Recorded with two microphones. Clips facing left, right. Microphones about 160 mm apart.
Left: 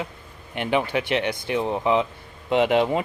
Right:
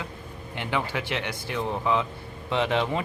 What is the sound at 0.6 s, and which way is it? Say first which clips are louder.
Speech: left 6 dB; 20° left (ahead or behind).